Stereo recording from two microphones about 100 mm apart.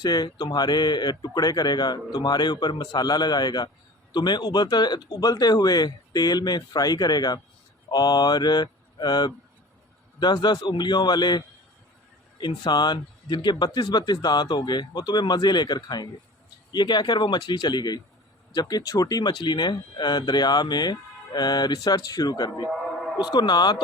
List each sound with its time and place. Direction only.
0.0 s speech: 45° left (ahead or behind)